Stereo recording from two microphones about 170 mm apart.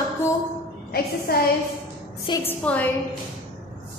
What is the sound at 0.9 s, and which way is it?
Speech, 65° left (ahead or behind).